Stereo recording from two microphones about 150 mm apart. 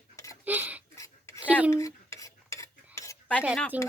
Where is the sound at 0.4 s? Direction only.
10° right (ahead or behind).